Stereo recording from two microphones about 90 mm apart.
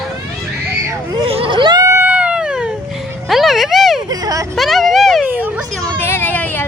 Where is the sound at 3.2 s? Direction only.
Centre (ahead or behind).